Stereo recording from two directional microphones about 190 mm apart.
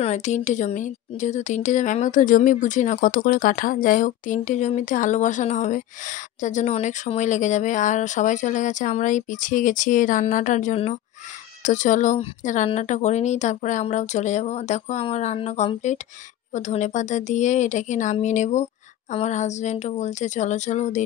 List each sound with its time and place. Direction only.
0.0 s a woman's voice: 40° left (ahead or behind)